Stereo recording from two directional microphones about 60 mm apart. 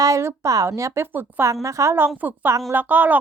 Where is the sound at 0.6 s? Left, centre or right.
Right.